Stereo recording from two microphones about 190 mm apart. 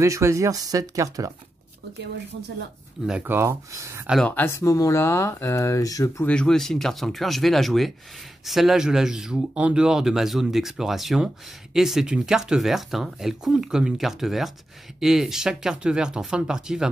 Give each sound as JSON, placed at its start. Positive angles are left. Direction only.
{"t": 0.0, "sound": "speech", "side_deg": -15}
{"t": 3.1, "sound": "speech", "side_deg": -10}
{"t": 4.1, "sound": "speech", "side_deg": 5}
{"t": 4.5, "sound": "speech", "side_deg": 15}
{"t": 6.3, "sound": "speech", "side_deg": 5}